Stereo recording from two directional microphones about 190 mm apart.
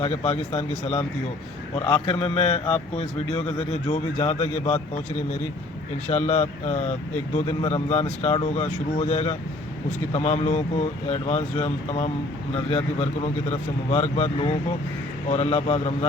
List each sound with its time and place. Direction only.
0.0 s speech: 35° left (ahead or behind)
1.7 s a man's voice: 25° left (ahead or behind)
6.1 s speech: 35° left (ahead or behind)